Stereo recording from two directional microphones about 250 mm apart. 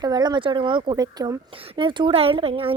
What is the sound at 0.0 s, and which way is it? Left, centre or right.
Speech, centre.